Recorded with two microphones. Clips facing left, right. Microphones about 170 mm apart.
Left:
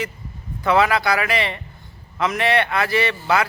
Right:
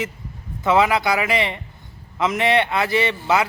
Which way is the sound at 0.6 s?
20° right (ahead or behind).